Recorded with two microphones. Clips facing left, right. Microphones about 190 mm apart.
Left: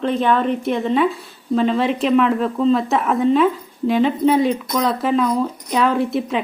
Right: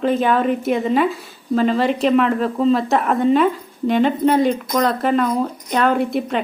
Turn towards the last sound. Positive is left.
turn(degrees=0)  # may be behind; listen again after turning